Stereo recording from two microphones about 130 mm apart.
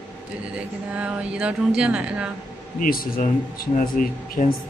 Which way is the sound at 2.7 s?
90° left.